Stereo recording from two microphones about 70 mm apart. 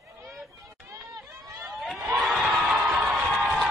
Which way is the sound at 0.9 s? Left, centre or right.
Right.